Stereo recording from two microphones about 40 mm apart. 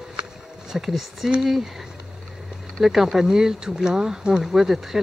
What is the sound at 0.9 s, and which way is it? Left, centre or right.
Speech, centre.